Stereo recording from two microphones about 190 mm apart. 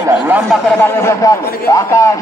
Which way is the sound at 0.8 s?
15° left (ahead or behind).